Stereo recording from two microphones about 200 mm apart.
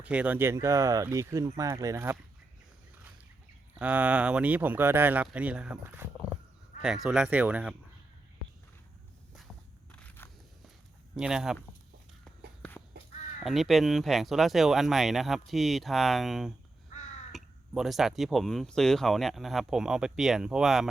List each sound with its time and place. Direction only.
0.0 s speech: 5° right (ahead or behind)
3.8 s speech: 10° right (ahead or behind)
9.9 s a sound: 5° left (ahead or behind)
11.1 s speech: 5° right (ahead or behind)
12.9 s crow: 50° right (ahead or behind)
13.4 s speech: centre (ahead or behind)